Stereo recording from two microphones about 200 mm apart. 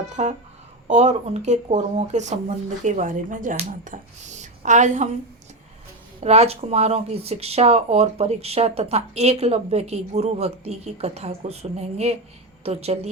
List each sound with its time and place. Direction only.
0.2 s speech: 35° right (ahead or behind)
6.1 s speech: 30° right (ahead or behind)